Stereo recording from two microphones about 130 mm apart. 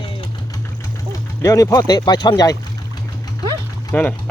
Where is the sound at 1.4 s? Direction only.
25° left (ahead or behind).